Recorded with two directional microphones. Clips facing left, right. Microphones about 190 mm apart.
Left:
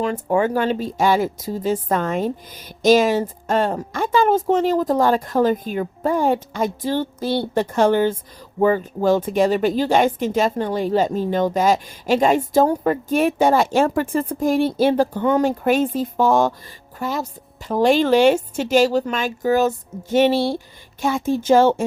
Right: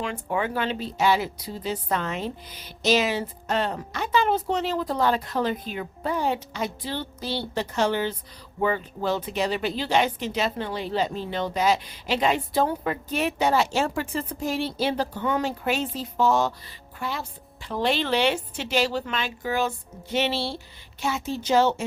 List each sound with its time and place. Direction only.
0.0 s a woman's voice: 40° left (ahead or behind)